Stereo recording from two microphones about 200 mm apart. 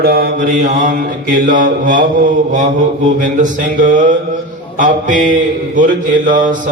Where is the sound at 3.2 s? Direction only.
40° right (ahead or behind).